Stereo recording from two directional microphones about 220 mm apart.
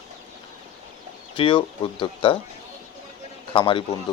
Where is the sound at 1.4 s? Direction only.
25° left (ahead or behind).